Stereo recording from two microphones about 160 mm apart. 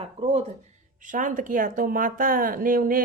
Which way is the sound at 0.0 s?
40° right (ahead or behind).